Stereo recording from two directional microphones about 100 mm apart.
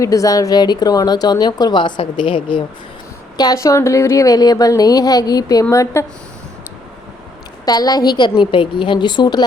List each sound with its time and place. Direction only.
0.0 s speech: 35° left (ahead or behind); by 2.6 s 55° left (ahead or behind)
3.3 s a woman's voice: 40° left (ahead or behind)
7.6 s speech: 40° left (ahead or behind)